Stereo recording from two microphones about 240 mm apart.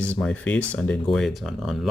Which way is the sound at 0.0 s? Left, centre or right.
Centre.